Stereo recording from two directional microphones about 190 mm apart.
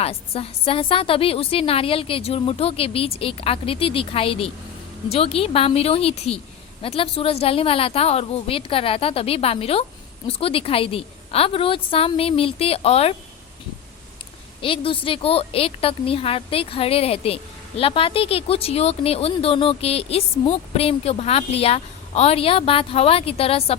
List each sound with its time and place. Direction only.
0.0 s a woman's voice: 30° left (ahead or behind)
14.6 s speech: 30° left (ahead or behind)